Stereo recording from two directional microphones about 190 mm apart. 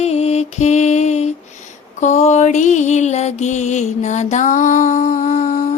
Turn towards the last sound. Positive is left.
turn(degrees=40)  # may be behind; listen again after turning